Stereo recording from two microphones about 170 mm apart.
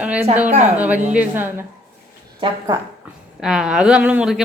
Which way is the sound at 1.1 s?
10° right (ahead or behind).